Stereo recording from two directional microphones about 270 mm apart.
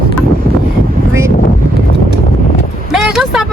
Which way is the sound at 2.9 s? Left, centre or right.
Centre.